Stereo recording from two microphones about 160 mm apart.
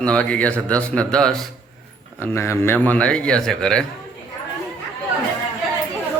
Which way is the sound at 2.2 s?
15° left (ahead or behind).